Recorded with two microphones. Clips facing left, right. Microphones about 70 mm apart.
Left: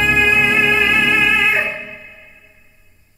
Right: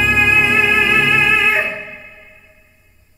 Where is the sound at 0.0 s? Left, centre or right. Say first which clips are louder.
Even; centre.